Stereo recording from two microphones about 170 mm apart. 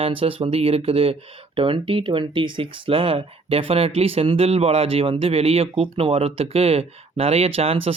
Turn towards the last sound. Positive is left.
turn(degrees=-35)  # may be behind; listen again after turning